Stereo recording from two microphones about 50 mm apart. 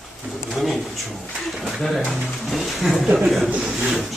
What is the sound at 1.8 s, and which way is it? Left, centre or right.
A man's voice, centre.